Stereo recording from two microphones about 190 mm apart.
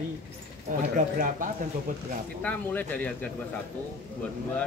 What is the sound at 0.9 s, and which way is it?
Speech, 45° right (ahead or behind).